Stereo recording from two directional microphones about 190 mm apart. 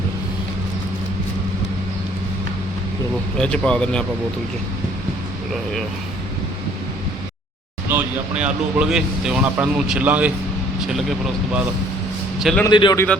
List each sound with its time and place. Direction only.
3.3 s speech: 5° left (ahead or behind)
7.9 s speech: 10° right (ahead or behind)
12.4 s a man's voice: centre (ahead or behind)
12.7 s speech: 25° left (ahead or behind)